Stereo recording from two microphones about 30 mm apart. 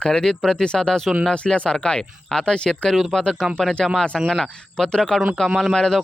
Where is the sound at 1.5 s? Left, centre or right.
Left.